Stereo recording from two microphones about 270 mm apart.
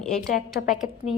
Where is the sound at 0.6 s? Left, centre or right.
Left.